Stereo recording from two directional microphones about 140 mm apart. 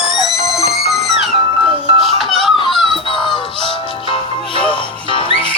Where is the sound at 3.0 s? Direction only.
35° left (ahead or behind).